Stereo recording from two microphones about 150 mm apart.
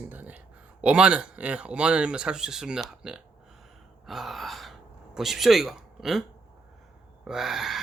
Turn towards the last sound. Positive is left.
turn(degrees=0)  # may be behind; listen again after turning